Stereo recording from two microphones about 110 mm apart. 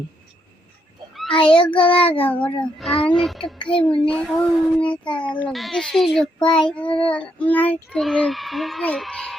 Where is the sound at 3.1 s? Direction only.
Centre (ahead or behind).